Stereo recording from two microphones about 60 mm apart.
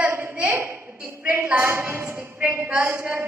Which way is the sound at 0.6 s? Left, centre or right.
Right.